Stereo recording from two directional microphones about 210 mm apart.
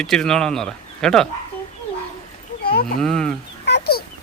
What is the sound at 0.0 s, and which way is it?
Speech, 5° left (ahead or behind).